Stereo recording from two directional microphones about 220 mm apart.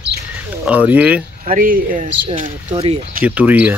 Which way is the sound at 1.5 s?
40° right (ahead or behind).